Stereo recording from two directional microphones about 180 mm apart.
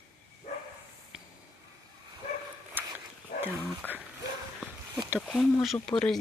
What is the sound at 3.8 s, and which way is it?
Speech, 10° left (ahead or behind).